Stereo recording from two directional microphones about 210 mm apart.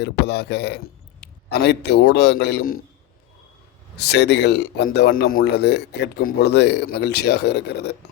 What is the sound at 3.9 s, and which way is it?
A man's voice, 50° left (ahead or behind).